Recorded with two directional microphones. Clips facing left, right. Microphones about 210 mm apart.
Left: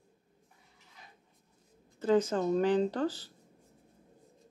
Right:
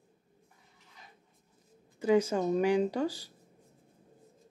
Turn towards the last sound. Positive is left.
turn(degrees=-10)  # may be behind; listen again after turning